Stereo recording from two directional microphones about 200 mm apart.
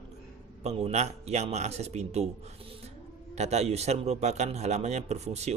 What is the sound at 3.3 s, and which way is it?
Speech, 35° right (ahead or behind).